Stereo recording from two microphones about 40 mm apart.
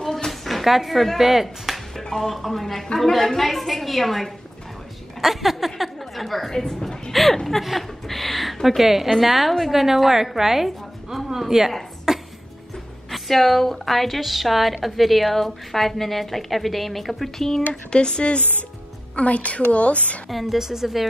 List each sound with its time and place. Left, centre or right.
0.0 s a sound: centre
0.3 s music: centre
2.0 s a woman's voice: centre
6.5 s speech: centre
7.1 s a woman's voice: centre
12.1 s music: centre
13.1 s a woman's voice: centre
17.9 s a sound: left
19.1 s a woman's voice: left
20.2 s a woman's voice: centre